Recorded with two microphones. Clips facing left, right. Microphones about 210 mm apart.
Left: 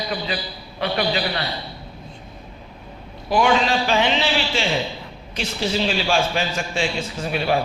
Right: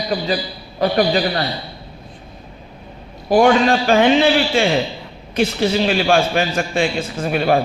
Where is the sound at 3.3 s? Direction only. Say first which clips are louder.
Right 6 dB; 50° right (ahead or behind).